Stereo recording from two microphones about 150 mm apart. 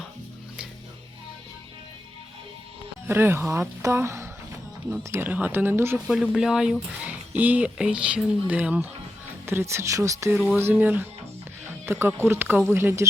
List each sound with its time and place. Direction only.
3.1 s speech: 15° right (ahead or behind)
6.3 s speech: 5° right (ahead or behind); by 10.3 s 20° right (ahead or behind)
10.3 s speech: centre (ahead or behind)
10.6 s speech: 15° right (ahead or behind)